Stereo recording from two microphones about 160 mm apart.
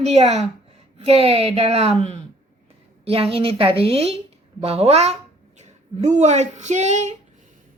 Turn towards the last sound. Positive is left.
turn(degrees=-45)  # may be behind; listen again after turning